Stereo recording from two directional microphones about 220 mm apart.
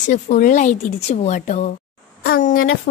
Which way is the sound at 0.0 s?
35° left (ahead or behind).